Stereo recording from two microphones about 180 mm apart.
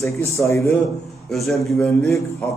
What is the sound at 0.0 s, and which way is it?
Speech, 15° left (ahead or behind).